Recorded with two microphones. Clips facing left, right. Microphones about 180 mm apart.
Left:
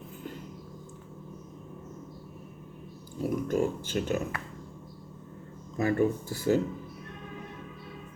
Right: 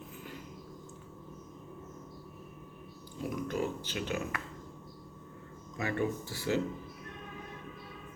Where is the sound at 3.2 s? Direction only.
45° left (ahead or behind).